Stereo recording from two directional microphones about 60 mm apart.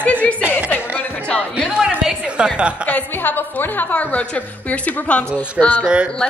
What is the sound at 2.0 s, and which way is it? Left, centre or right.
Speech, centre.